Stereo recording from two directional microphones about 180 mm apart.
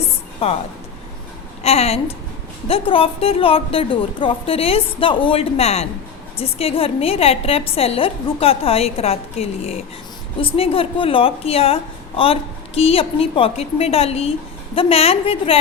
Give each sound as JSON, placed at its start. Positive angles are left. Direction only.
{"t": 0.4, "sound": "a woman's voice", "side_deg": 35}
{"t": 1.6, "sound": "a woman's voice", "side_deg": 35}